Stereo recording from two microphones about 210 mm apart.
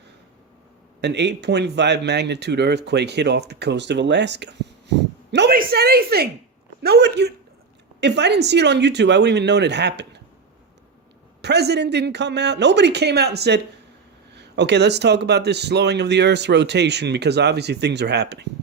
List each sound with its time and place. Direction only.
1.0 s speech: 55° right (ahead or behind)
4.9 s a sound: 55° right (ahead or behind)
6.8 s speech: 50° right (ahead or behind)
11.4 s speech: 50° right (ahead or behind)